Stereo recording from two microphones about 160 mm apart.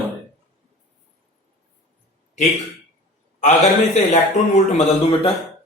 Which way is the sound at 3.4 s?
45° left (ahead or behind).